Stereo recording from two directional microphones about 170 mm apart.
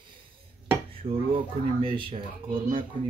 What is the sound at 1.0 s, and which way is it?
Speech, 30° right (ahead or behind).